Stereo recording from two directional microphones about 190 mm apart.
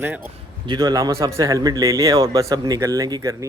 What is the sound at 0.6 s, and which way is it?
A man's voice, 20° right (ahead or behind).